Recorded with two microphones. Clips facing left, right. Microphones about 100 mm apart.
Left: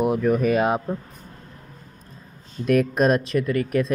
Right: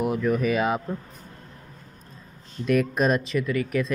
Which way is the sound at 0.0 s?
45° left (ahead or behind).